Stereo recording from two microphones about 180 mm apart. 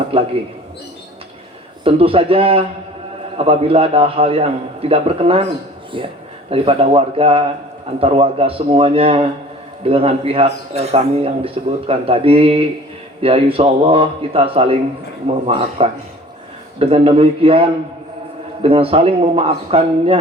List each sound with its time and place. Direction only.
0.1 s a man's voice: 30° right (ahead or behind)
1.8 s a man's voice: 30° right (ahead or behind)